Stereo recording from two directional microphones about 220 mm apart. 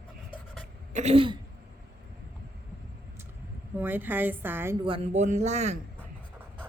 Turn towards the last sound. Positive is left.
turn(degrees=-30)  # may be behind; listen again after turning